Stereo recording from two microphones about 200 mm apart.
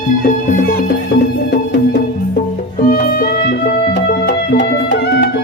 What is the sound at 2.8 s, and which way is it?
Music, 50° left (ahead or behind).